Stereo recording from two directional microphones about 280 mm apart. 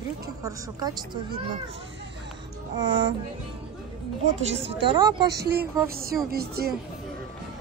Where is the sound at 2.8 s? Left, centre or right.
Right.